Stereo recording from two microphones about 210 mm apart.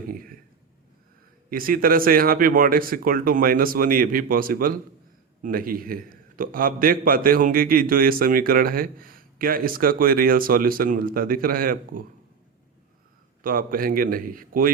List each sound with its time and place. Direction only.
0.1 s a sound: 40° right (ahead or behind)
1.5 s a man's voice: 45° right (ahead or behind)
13.4 s a man's voice: 40° right (ahead or behind)